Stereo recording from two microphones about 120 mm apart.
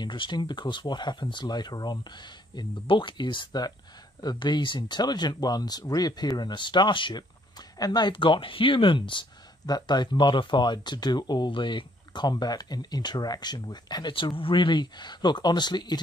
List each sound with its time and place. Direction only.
0.0 s speech: 40° left (ahead or behind)